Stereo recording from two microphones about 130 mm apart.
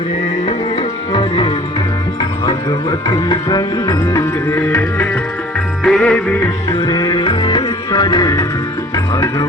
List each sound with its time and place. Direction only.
0.4 s tabla: 40° left (ahead or behind)
2.5 s music: 30° left (ahead or behind); by 6.4 s 10° left (ahead or behind)
6.7 s music: 30° left (ahead or behind)